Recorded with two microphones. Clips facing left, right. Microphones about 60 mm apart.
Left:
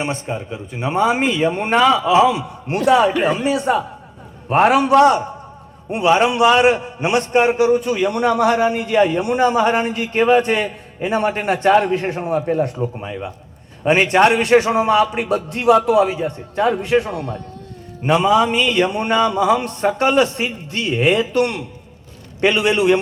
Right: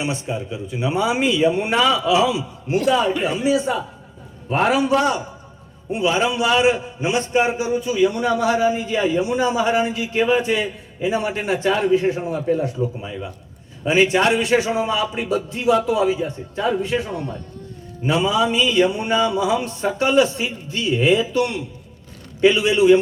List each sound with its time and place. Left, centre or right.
0.0 s a man's voice: left